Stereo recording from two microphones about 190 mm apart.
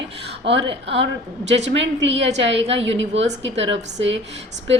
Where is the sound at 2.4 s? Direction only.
70° right (ahead or behind).